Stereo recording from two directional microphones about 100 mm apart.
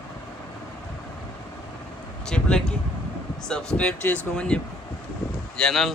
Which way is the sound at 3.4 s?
10° left (ahead or behind).